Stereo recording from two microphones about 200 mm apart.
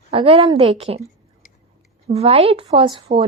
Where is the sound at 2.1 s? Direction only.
30° right (ahead or behind).